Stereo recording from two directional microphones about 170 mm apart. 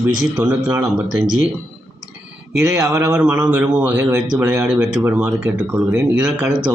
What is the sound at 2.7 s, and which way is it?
Speech, 20° right (ahead or behind).